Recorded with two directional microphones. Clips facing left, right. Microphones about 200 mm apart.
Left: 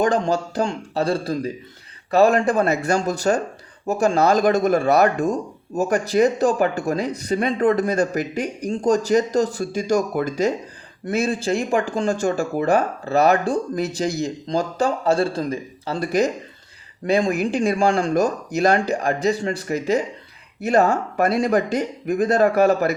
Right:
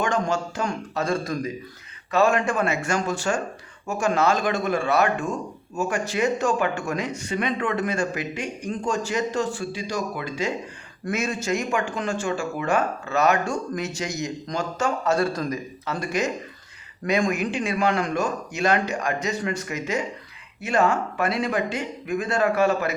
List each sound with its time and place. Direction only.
0.0 s speech: 35° left (ahead or behind)